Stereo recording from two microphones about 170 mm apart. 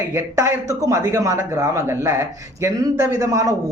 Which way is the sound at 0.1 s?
15° right (ahead or behind).